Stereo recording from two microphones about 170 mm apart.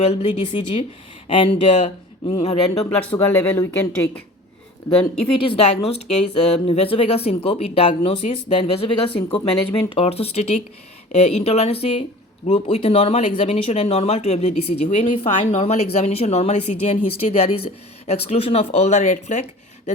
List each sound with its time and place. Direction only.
0.0 s speech: 40° left (ahead or behind)
2.9 s speech: 10° left (ahead or behind)
5.4 s speech: 35° left (ahead or behind)